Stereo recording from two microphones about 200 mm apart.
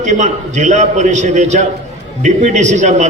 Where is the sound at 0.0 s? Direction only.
35° right (ahead or behind).